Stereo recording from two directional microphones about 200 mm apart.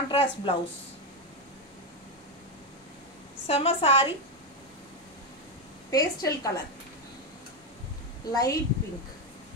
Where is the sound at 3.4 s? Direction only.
30° left (ahead or behind).